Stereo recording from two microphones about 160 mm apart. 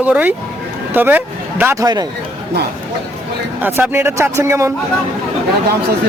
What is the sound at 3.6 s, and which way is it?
Speech, 15° right (ahead or behind).